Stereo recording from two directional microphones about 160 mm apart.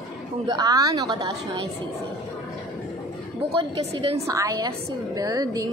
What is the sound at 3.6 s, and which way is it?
Speech, 40° right (ahead or behind).